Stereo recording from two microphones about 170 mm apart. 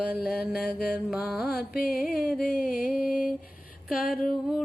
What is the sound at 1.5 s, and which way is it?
Carnatic music, 60° left (ahead or behind).